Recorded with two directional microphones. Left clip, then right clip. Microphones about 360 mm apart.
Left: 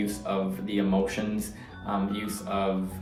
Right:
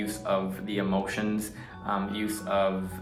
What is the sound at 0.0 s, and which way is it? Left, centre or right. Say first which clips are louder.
Speech: right 1 dB; centre.